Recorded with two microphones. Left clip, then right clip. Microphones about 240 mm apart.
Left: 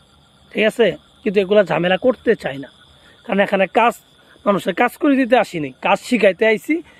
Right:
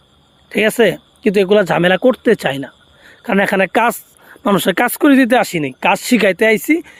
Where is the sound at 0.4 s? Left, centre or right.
Right.